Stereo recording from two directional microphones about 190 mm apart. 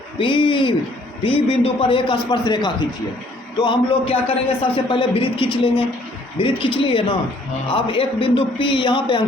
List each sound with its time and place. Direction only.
0.2 s a man's voice: 25° left (ahead or behind)